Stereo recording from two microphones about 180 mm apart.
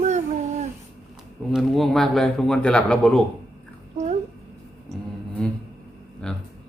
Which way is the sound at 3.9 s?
40° right (ahead or behind).